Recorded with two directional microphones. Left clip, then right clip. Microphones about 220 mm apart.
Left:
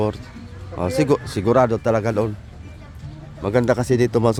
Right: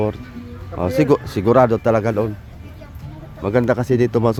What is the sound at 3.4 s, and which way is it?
Speech, centre (ahead or behind).